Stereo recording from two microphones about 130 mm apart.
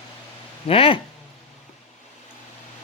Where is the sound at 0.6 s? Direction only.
45° left (ahead or behind).